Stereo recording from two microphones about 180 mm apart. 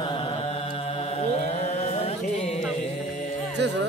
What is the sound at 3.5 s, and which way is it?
Music, 70° right (ahead or behind).